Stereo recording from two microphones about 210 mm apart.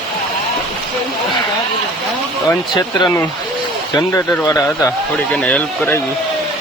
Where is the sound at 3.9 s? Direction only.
15° left (ahead or behind).